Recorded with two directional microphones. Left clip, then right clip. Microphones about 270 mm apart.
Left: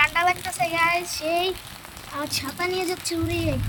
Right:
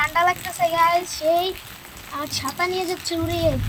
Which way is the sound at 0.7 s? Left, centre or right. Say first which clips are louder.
Right 4 dB; centre.